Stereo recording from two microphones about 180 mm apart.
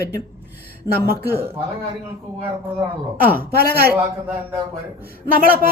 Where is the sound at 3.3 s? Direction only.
60° right (ahead or behind).